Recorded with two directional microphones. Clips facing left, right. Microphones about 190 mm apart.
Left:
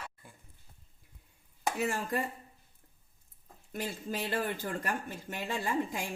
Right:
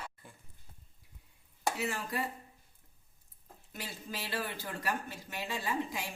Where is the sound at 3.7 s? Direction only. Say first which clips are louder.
Left 7 dB; 50° left (ahead or behind).